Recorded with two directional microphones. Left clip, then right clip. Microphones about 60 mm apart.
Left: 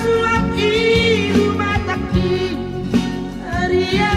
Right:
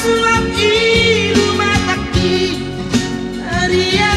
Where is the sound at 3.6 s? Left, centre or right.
Right.